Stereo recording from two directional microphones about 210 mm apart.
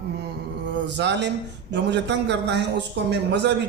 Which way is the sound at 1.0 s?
55° right (ahead or behind).